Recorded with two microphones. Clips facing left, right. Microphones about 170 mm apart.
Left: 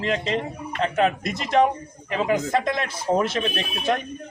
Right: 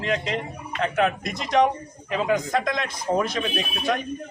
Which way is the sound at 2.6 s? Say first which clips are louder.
Left 2 dB; 30° left (ahead or behind).